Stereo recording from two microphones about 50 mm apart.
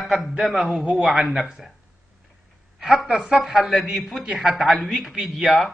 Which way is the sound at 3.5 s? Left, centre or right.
Centre.